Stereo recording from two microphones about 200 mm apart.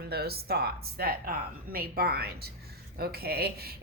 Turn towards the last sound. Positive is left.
turn(degrees=-50)  # may be behind; listen again after turning